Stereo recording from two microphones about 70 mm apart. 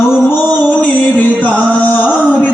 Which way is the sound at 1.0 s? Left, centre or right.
Left.